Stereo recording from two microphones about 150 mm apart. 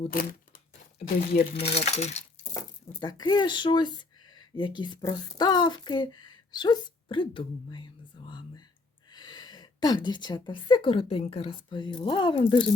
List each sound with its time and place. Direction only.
0.1 s speech: 75° left (ahead or behind)
1.6 s speech: 45° left (ahead or behind)
3.0 s speech: 30° left (ahead or behind)
8.3 s a sound: 30° left (ahead or behind)
9.0 s a woman's voice: 30° left (ahead or behind)